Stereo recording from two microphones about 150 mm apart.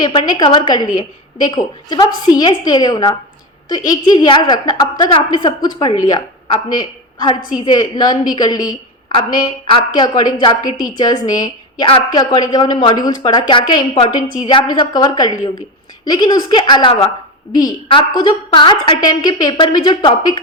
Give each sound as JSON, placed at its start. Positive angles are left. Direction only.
{"t": 0.0, "sound": "a woman's voice", "side_deg": 30}
{"t": 11.9, "sound": "a woman's voice", "side_deg": 35}
{"t": 12.2, "sound": "a woman's voice", "side_deg": 25}
{"t": 18.2, "sound": "a woman's voice", "side_deg": 30}